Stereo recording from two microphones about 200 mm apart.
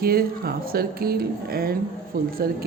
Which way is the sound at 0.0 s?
50° right (ahead or behind).